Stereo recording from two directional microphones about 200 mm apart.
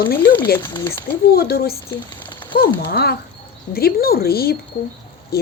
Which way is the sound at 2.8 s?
50° left (ahead or behind).